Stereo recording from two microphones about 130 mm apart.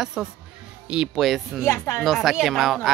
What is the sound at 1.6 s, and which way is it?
Speech, 20° left (ahead or behind).